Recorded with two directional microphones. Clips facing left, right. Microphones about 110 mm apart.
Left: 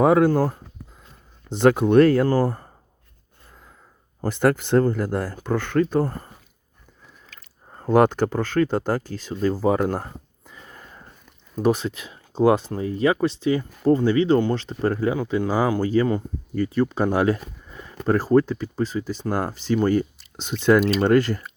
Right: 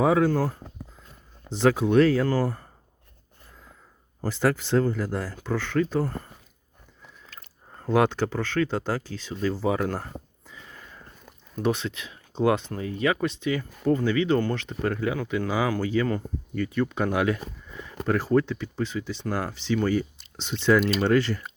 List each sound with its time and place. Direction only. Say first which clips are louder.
0.0 s speech: left 4 dB; 55° left (ahead or behind)
1.5 s speech: left 4 dB; 55° left (ahead or behind)
2.2 s speech: left 4 dB; 40° left (ahead or behind)
4.2 s speech: left 4 dB; 55° left (ahead or behind)
7.8 s speech: left 5 dB; 45° left (ahead or behind)
10.4 s a sound: left 2 dB; 45° left (ahead or behind)
11.6 s speech: left 5 dB; 40° left (ahead or behind)
17.7 s a sound: even; 35° left (ahead or behind)
18.0 s speech: left 5 dB; 35° left (ahead or behind)